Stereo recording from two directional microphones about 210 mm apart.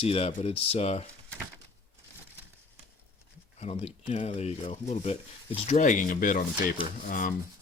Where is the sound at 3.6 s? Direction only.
30° left (ahead or behind).